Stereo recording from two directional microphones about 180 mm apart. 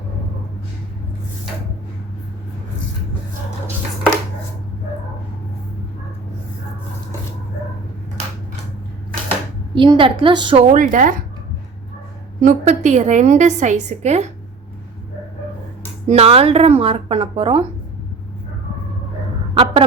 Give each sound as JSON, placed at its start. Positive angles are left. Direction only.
{"t": 9.7, "sound": "a woman's voice", "side_deg": -30}
{"t": 10.7, "sound": "speech", "side_deg": -45}
{"t": 12.4, "sound": "a woman's voice", "side_deg": -45}
{"t": 16.0, "sound": "a woman's voice", "side_deg": -35}